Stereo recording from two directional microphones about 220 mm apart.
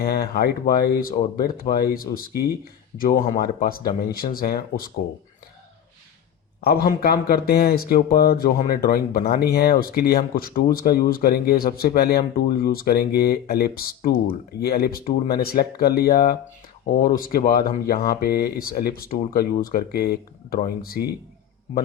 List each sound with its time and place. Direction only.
0.0 s speech: 45° left (ahead or behind)
6.6 s speech: 45° left (ahead or behind)